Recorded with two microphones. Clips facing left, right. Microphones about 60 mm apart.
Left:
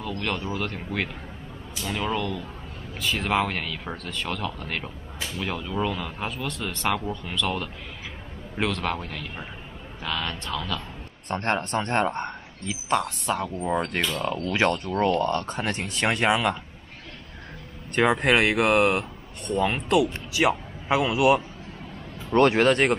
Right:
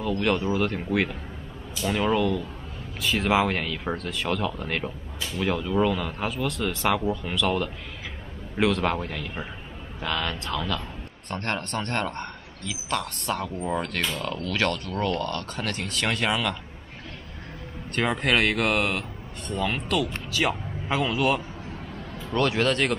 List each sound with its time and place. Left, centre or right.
0.0 s speech: centre
11.2 s speech: left
13.0 s speech: centre; by 16.3 s left
17.9 s speech: centre
18.8 s speech: left
19.5 s a man's voice: centre
22.3 s a man's voice: left